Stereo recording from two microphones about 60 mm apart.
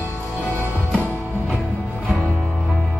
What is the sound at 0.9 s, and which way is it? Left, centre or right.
Music, left.